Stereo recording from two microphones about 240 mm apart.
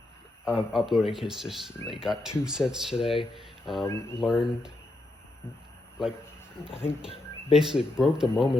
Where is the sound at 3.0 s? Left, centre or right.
Left.